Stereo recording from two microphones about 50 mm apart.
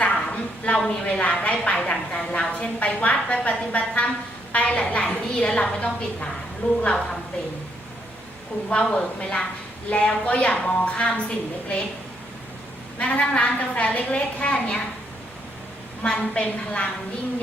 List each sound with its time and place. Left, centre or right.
0.0 s a sound: left
1.2 s a woman's voice: left
8.7 s a woman's voice: centre
13.1 s a woman's voice: left
16.0 s a woman's voice: left